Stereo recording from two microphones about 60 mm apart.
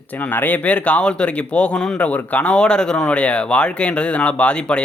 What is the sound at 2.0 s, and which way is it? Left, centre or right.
Speech, left.